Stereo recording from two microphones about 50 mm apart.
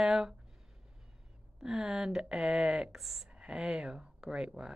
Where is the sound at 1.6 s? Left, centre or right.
Centre.